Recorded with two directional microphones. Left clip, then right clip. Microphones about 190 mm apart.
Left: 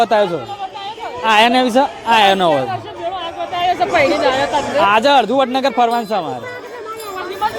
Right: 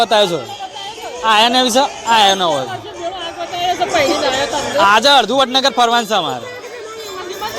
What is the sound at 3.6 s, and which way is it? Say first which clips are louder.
Speech: left 1 dB; 15° right (ahead or behind).